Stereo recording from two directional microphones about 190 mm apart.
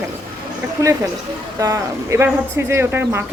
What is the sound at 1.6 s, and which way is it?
A woman's voice, 15° right (ahead or behind).